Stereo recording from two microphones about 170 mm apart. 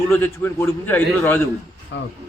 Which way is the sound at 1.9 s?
90° left.